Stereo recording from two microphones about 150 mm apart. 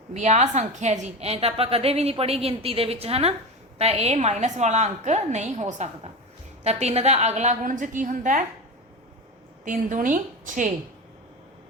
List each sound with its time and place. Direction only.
0.1 s a woman's voice: 50° right (ahead or behind)
9.6 s a woman's voice: 60° right (ahead or behind)